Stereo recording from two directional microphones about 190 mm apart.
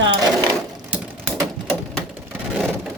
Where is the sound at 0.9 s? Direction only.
10° right (ahead or behind).